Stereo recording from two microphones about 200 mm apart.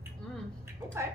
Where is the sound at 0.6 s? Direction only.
15° right (ahead or behind).